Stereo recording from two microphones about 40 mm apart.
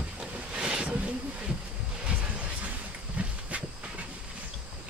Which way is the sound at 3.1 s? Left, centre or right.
Right.